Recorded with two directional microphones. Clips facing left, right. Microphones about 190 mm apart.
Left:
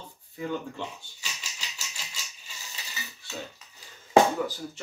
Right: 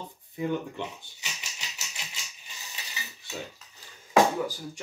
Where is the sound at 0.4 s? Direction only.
20° right (ahead or behind).